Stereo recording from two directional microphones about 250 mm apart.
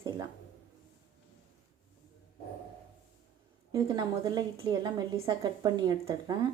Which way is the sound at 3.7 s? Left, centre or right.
Centre.